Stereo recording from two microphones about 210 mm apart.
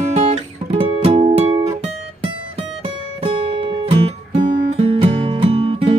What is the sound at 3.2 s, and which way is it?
Guitar, 25° right (ahead or behind).